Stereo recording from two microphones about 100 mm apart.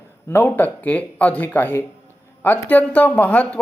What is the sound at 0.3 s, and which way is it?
A man's voice, 20° left (ahead or behind).